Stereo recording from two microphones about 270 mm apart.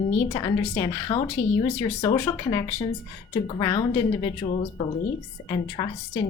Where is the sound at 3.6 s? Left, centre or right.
Centre.